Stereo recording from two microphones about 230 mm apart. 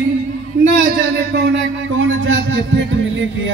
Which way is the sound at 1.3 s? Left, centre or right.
Right.